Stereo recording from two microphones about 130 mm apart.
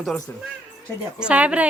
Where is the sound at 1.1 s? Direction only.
10° right (ahead or behind).